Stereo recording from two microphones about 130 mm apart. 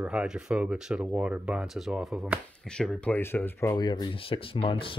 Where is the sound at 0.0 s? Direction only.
10° right (ahead or behind).